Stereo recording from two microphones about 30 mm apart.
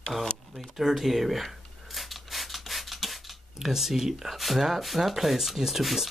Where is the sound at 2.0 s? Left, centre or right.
Centre.